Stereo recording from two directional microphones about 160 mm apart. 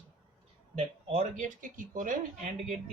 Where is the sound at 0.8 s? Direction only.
45° right (ahead or behind).